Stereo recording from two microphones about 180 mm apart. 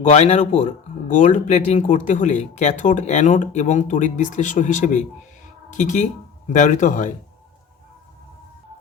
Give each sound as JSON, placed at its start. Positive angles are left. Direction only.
{"t": 0.0, "sound": "speech", "side_deg": 40}